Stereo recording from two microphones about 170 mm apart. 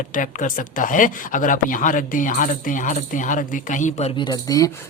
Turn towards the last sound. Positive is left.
turn(degrees=20)  # may be behind; listen again after turning